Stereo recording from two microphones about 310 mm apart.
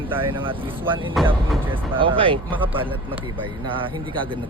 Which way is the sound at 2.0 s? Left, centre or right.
Centre.